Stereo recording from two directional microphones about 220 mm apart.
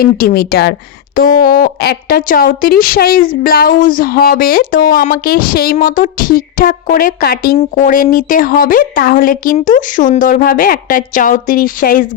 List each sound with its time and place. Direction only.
0.0 s speech: 45° left (ahead or behind)